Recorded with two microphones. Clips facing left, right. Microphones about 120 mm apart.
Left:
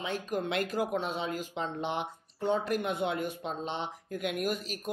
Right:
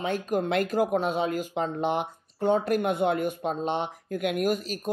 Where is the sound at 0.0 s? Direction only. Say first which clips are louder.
Right 6 dB; 50° right (ahead or behind).